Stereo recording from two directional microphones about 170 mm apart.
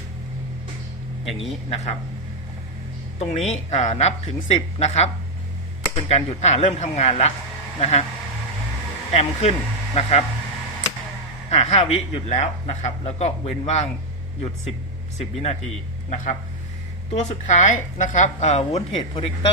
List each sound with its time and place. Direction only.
1.7 s speech: 40° left (ahead or behind)
3.2 s speech: 40° left (ahead or behind)
9.1 s speech: 40° left (ahead or behind)
11.5 s speech: 40° left (ahead or behind)
15.2 s speech: 40° left (ahead or behind)